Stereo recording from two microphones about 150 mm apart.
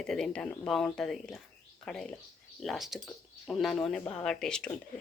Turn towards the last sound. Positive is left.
turn(degrees=5)  # may be behind; listen again after turning